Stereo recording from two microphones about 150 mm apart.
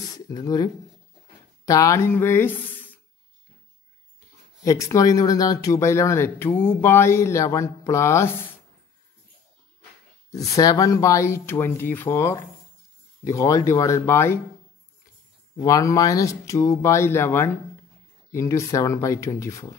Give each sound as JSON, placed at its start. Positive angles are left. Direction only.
{"t": 0.3, "sound": "speech", "side_deg": 25}
{"t": 1.7, "sound": "speech", "side_deg": 20}
{"t": 4.6, "sound": "speech", "side_deg": 20}
{"t": 10.3, "sound": "speech", "side_deg": 20}
{"t": 15.5, "sound": "speech", "side_deg": 20}